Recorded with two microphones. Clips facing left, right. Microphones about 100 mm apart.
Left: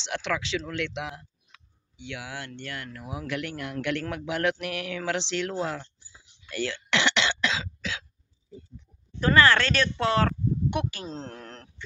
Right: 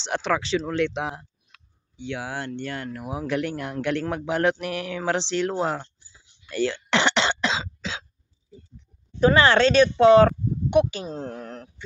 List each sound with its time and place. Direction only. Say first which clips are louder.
0.0 s a man's voice: right 5 dB; 35° right (ahead or behind)
6.5 s cough: right 5 dB; 35° right (ahead or behind)
9.2 s speech: right 4 dB; 20° right (ahead or behind)